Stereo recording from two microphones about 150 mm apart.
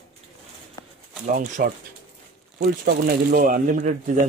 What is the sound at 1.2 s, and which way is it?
Speech, 60° right (ahead or behind).